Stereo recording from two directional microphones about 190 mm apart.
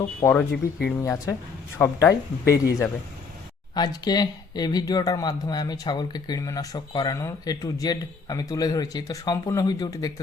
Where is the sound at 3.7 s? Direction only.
20° left (ahead or behind).